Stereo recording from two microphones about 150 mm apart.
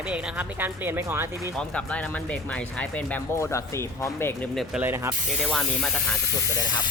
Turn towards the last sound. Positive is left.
turn(degrees=0)  # may be behind; listen again after turning